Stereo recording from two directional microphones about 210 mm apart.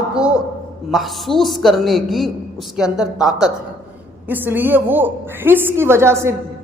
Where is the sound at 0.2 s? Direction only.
5° right (ahead or behind).